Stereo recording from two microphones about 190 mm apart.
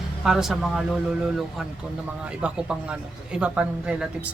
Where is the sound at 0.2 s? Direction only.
Centre (ahead or behind).